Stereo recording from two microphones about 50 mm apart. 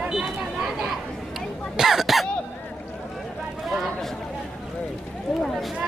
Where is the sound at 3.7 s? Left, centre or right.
Centre.